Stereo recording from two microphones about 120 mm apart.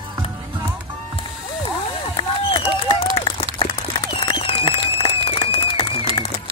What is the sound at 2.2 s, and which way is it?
Run, 45° left (ahead or behind).